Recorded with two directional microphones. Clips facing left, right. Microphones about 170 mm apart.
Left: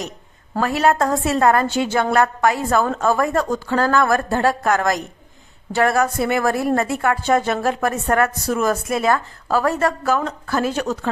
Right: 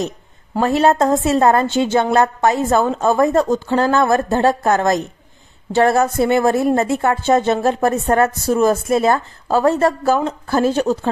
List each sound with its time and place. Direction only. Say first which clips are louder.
0.6 s a woman's voice: right 3 dB; 25° right (ahead or behind)